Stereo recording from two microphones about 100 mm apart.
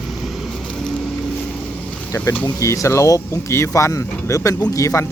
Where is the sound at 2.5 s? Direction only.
30° left (ahead or behind).